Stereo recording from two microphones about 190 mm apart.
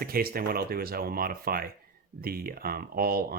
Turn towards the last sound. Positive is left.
turn(degrees=-50)  # may be behind; listen again after turning